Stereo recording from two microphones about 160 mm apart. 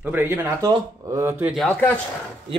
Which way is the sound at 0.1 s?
15° right (ahead or behind).